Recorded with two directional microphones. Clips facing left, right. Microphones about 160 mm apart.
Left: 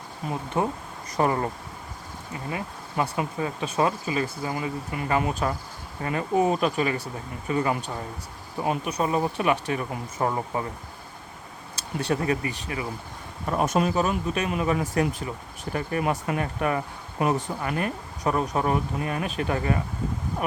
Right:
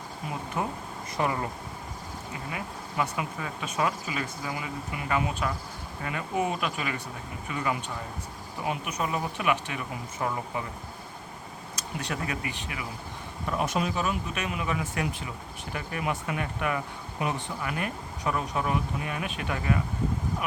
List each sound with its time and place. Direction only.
0.6 s speech: 30° left (ahead or behind)
1.1 s speech: 40° left (ahead or behind)
3.0 s speech: 30° left (ahead or behind)
11.8 s speech: 30° left (ahead or behind)